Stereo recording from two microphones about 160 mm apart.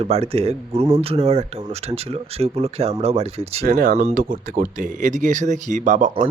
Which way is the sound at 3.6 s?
65° right (ahead or behind).